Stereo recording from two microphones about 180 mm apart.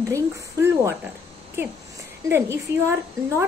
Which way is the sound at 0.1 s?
15° right (ahead or behind).